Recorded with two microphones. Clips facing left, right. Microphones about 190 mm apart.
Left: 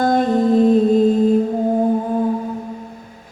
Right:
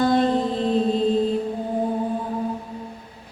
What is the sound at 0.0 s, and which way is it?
Music, 45° left (ahead or behind).